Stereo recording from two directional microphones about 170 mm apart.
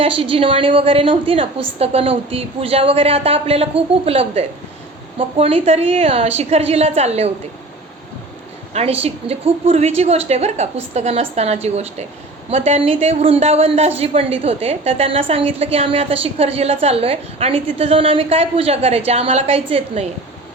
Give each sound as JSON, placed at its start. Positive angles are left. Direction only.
{"t": 0.0, "sound": "a woman's voice", "side_deg": -35}
{"t": 8.7, "sound": "a woman's voice", "side_deg": -35}